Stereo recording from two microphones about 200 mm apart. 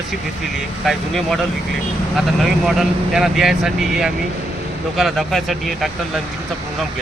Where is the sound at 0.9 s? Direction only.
Centre (ahead or behind).